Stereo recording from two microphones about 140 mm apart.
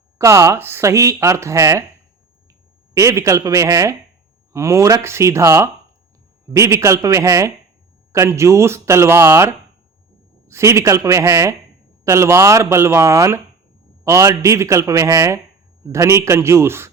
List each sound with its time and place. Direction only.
0.2 s speech: 20° right (ahead or behind)
2.9 s speech: 20° right (ahead or behind)